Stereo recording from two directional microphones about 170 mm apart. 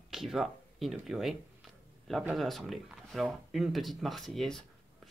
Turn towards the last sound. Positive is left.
turn(degrees=0)  # may be behind; listen again after turning